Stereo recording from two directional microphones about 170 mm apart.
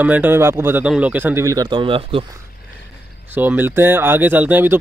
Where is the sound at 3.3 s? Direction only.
10° right (ahead or behind).